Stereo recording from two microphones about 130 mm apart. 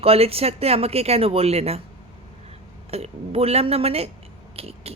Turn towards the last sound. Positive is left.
turn(degrees=-50)  # may be behind; listen again after turning